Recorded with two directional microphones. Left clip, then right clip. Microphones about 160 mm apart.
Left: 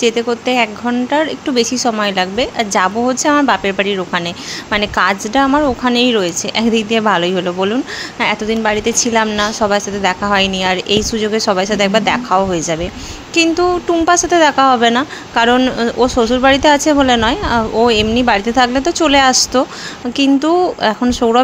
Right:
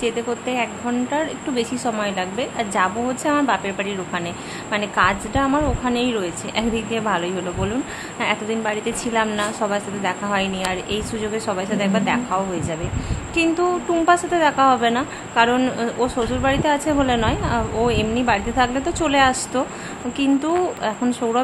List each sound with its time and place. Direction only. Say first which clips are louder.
0.0 s speech: left 8 dB; 40° left (ahead or behind)